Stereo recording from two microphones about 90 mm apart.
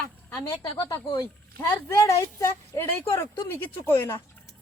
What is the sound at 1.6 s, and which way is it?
Speech, 30° left (ahead or behind).